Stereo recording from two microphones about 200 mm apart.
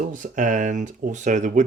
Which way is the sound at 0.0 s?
40° right (ahead or behind).